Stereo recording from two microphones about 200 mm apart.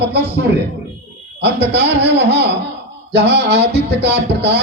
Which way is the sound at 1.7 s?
55° right (ahead or behind).